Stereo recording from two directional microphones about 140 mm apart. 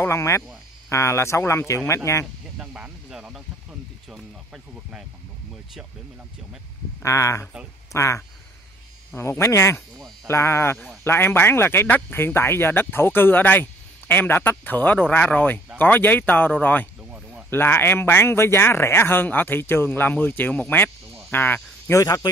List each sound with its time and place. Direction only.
0.0 s speech: 20° left (ahead or behind)
2.6 s speech: 10° right (ahead or behind)
7.0 s speech: 20° left (ahead or behind)
17.1 s a sound: 10° right (ahead or behind)
17.5 s speech: 15° left (ahead or behind)
21.3 s cricket: 15° left (ahead or behind)
22.0 s speech: 30° left (ahead or behind)